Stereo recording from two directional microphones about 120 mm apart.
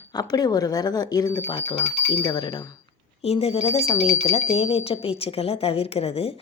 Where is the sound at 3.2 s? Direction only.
60° left (ahead or behind).